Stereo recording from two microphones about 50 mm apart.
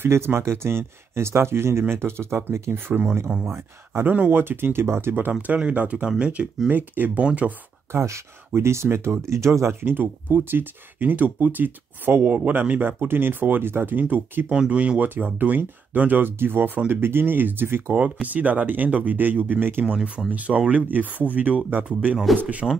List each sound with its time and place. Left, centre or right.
0.0 s speech: right
2.7 s speech: right
5.5 s speech: right
6.7 s speech: right
7.9 s speech: right
9.8 s speech: right
13.1 s speech: right
14.5 s speech: right
17.9 s speech: right
20.2 s speech: right